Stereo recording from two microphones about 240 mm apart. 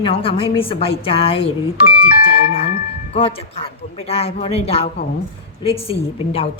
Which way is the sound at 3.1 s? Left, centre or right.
Left.